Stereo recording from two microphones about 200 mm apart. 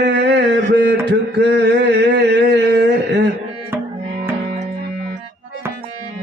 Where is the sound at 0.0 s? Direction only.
60° right (ahead or behind).